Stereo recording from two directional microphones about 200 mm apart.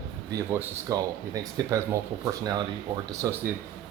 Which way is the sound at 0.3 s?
15° right (ahead or behind).